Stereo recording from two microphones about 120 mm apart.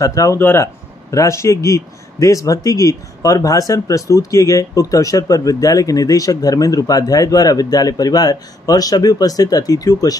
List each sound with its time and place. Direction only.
0.0 s speech: 30° left (ahead or behind)
0.4 s speech: 20° left (ahead or behind)